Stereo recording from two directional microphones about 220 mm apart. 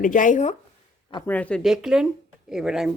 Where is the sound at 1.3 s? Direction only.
5° left (ahead or behind).